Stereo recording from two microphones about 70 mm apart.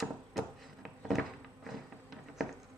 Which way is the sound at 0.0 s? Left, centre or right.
Centre.